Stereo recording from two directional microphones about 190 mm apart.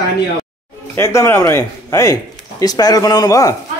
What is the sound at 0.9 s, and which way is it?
A man's voice, 15° left (ahead or behind).